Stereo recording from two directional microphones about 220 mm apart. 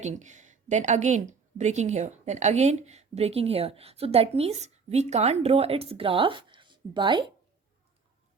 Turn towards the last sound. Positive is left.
turn(degrees=-20)  # may be behind; listen again after turning